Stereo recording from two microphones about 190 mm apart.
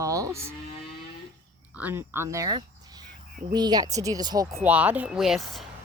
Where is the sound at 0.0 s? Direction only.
15° right (ahead or behind).